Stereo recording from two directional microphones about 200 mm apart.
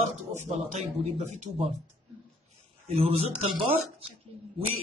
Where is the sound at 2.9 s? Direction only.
30° right (ahead or behind).